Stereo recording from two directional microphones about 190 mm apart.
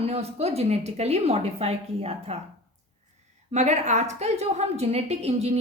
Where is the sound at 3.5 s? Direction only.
35° right (ahead or behind).